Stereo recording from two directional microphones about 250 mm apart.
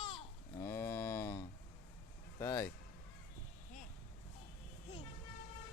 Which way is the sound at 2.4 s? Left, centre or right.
Centre.